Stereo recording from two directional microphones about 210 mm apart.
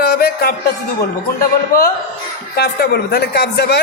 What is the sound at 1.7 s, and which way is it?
A man's voice, 45° left (ahead or behind).